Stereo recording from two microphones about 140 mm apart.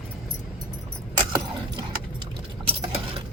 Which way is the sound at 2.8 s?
40° right (ahead or behind).